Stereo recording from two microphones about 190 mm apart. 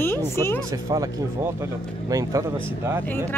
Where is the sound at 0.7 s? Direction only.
20° right (ahead or behind).